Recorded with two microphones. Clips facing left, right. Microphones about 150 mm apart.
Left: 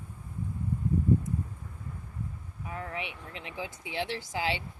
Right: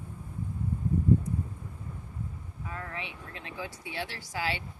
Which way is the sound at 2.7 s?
20° left (ahead or behind).